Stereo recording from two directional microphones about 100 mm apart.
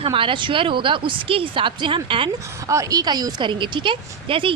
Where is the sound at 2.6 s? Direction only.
30° right (ahead or behind).